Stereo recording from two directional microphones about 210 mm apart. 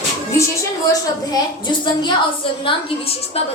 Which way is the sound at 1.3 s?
20° left (ahead or behind).